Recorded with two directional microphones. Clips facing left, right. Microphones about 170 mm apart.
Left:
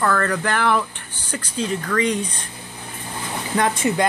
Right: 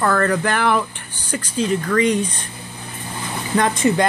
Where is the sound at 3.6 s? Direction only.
5° left (ahead or behind).